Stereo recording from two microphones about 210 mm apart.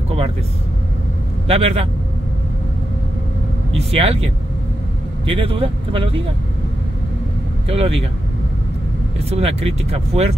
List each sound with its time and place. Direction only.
1.5 s speech: 30° right (ahead or behind)
3.7 s speech: 30° right (ahead or behind)
7.6 s speech: 30° right (ahead or behind)
9.3 s speech: 30° right (ahead or behind)